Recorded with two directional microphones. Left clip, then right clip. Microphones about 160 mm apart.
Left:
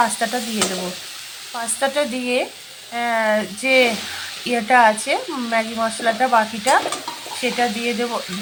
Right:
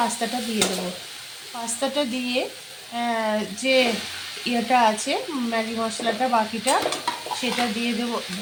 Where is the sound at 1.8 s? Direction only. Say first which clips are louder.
Left 5 dB; 15° left (ahead or behind).